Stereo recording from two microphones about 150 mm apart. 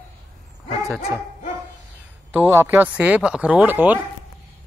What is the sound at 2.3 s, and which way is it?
Speech, 15° right (ahead or behind).